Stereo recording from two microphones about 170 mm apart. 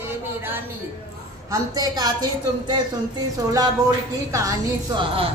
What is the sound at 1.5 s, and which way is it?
Speech, 20° right (ahead or behind).